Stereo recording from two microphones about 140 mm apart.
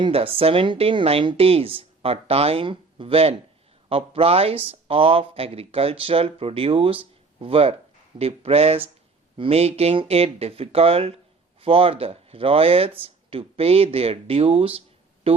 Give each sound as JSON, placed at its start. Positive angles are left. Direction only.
{"t": 0.0, "sound": "a woman's voice", "side_deg": -40}